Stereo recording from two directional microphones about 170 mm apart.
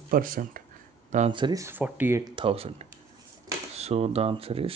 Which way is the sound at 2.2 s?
30° right (ahead or behind).